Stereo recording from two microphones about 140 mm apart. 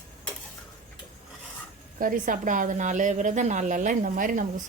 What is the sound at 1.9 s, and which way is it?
A woman's voice, 75° right (ahead or behind).